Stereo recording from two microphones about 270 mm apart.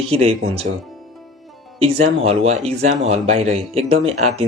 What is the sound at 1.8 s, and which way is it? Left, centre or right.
Speech, right.